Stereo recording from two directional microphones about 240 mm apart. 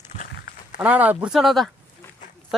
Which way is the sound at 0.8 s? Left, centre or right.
Centre.